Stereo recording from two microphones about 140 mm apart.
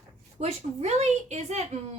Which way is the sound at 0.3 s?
55° right (ahead or behind).